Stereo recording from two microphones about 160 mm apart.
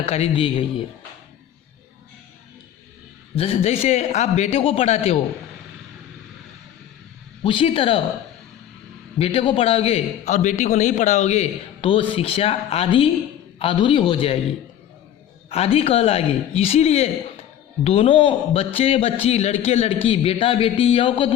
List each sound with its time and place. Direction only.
0.0 s a man's voice: 40° left (ahead or behind)
3.3 s a man's voice: 35° left (ahead or behind)
7.4 s a man's voice: 35° left (ahead or behind)
9.1 s a man's voice: 35° left (ahead or behind)
15.4 s a man's voice: 40° left (ahead or behind)